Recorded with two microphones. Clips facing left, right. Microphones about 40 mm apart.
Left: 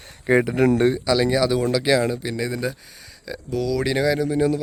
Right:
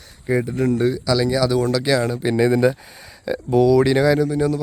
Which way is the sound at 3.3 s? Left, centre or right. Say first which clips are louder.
Right 9 dB; right.